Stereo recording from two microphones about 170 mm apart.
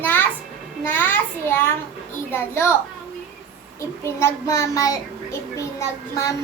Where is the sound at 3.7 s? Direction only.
15° left (ahead or behind).